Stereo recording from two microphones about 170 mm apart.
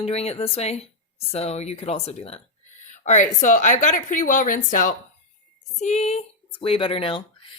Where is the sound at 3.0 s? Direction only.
45° left (ahead or behind); by 7.5 s 30° left (ahead or behind).